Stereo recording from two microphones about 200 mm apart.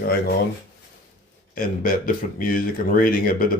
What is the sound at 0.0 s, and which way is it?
Speech, 50° left (ahead or behind).